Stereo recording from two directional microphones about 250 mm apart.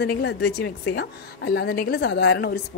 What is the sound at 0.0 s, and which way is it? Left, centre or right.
A man's voice, left.